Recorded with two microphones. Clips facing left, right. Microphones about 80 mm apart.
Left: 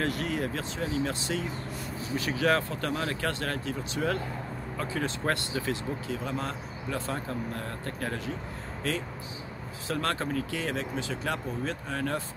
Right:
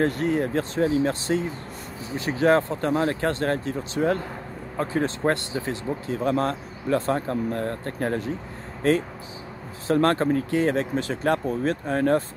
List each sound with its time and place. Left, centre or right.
0.0 s speech: right
9.8 s speech: right